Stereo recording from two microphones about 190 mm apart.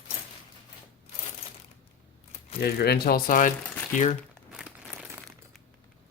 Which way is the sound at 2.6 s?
55° left (ahead or behind).